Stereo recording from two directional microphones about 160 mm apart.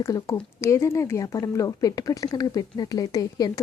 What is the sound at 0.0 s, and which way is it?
Speech, 20° left (ahead or behind).